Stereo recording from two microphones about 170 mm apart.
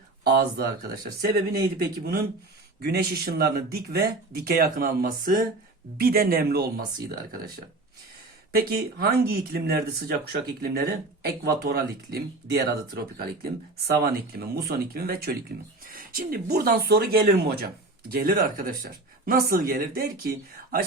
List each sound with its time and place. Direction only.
0.3 s speech: 65° right (ahead or behind)
8.5 s speech: 60° right (ahead or behind)